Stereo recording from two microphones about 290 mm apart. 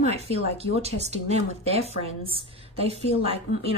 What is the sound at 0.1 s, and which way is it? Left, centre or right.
A woman's voice, right.